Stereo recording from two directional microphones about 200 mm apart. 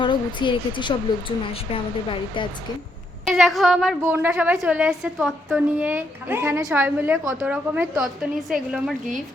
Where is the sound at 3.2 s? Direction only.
Centre (ahead or behind).